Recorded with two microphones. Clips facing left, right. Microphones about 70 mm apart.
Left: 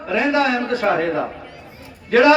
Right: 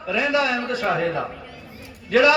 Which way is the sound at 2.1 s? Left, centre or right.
Left.